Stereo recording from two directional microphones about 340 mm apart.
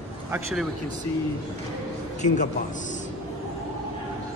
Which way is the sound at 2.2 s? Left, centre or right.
Left.